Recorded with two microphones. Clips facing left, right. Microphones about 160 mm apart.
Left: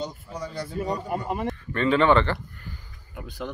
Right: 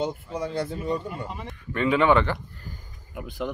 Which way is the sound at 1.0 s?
55° left (ahead or behind).